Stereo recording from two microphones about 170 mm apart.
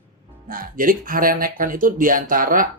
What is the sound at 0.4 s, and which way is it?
Speech, 55° right (ahead or behind).